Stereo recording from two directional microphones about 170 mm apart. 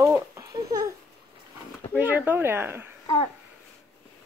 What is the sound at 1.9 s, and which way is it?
A child's voice, 10° right (ahead or behind).